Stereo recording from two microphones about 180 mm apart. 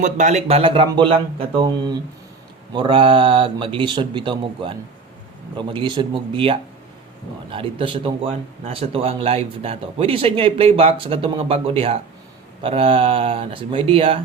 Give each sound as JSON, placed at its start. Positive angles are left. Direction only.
{"t": 0.0, "sound": "speech", "side_deg": -40}